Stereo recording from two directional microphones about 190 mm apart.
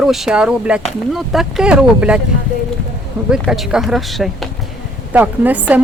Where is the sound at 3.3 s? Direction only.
Centre (ahead or behind).